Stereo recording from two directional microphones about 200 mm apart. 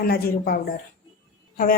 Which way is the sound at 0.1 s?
50° left (ahead or behind).